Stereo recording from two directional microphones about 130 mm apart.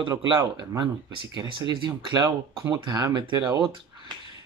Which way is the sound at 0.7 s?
35° right (ahead or behind).